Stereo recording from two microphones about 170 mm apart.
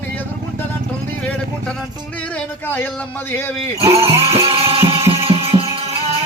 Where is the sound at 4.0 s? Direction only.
35° right (ahead or behind).